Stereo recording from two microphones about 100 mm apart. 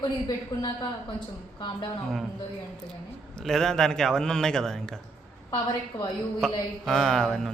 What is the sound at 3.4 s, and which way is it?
Speech, 5° left (ahead or behind).